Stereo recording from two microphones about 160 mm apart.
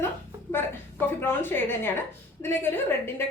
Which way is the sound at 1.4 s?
15° left (ahead or behind).